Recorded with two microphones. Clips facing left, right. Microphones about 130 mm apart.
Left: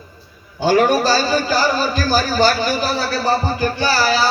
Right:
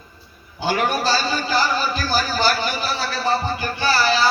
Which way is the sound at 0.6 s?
40° left (ahead or behind).